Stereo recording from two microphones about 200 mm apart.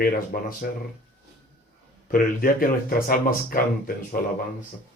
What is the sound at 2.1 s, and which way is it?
Speech, 45° left (ahead or behind).